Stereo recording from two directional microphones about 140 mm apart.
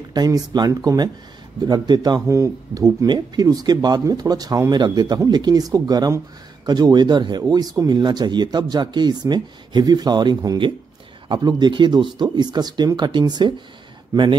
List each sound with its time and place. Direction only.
0.1 s a man's voice: 30° right (ahead or behind)